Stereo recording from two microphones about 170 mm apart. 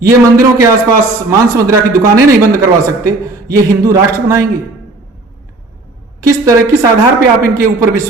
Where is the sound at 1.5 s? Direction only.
15° right (ahead or behind).